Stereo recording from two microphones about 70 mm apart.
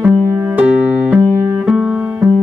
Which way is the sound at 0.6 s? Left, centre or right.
Centre.